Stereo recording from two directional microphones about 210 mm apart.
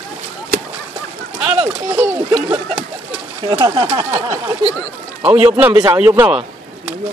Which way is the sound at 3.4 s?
25° right (ahead or behind).